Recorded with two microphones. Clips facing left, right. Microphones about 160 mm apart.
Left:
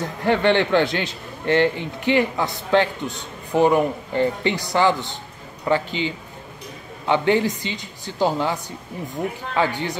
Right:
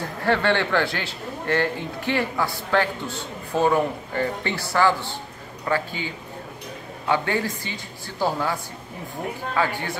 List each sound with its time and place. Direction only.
0.2 s a man's voice: 20° left (ahead or behind)
9.6 s a man's voice: 20° left (ahead or behind)